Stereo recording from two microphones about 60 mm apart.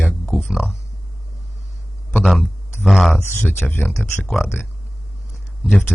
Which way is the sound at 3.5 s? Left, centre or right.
Left.